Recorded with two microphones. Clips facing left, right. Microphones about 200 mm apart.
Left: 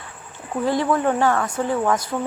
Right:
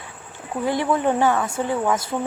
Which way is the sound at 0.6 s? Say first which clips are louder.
Left 1 dB; 20° right (ahead or behind).